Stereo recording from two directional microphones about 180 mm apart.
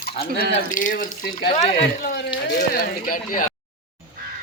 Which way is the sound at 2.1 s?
70° left (ahead or behind).